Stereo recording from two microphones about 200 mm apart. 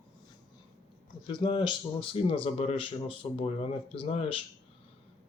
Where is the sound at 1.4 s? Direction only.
25° left (ahead or behind).